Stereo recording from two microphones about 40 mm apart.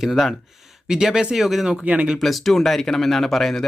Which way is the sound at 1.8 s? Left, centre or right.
Right.